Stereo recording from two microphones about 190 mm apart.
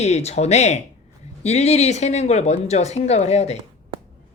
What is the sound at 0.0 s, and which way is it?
Speech, 35° left (ahead or behind).